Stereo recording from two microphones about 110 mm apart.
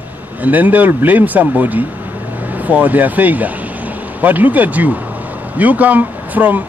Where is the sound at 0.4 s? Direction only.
15° right (ahead or behind).